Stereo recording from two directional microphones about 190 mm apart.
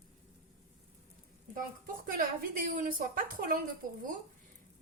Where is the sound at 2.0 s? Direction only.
45° right (ahead or behind).